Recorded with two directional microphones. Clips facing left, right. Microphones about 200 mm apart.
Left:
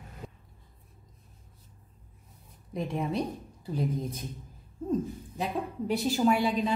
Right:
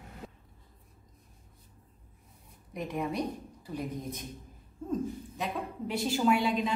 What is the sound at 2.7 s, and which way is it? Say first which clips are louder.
Speech: left 2 dB; 30° left (ahead or behind).